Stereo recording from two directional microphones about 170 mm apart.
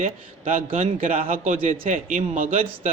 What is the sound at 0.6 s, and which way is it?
Speech, 35° right (ahead or behind).